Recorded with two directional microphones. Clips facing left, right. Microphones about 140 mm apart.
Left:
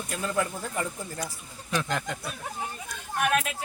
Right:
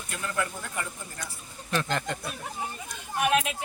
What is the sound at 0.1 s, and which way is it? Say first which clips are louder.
Speech: left 2 dB; 30° left (ahead or behind).